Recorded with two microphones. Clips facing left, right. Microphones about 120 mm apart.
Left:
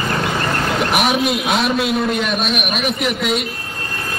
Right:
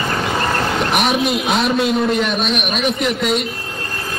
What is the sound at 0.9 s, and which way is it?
A man's voice, centre (ahead or behind).